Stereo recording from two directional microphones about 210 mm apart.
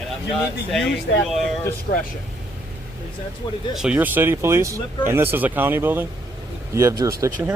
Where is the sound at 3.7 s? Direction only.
5° right (ahead or behind).